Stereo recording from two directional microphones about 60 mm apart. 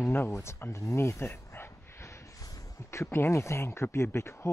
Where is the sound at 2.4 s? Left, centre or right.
Left.